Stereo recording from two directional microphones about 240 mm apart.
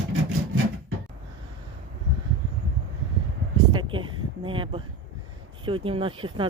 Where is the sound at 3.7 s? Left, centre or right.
Centre.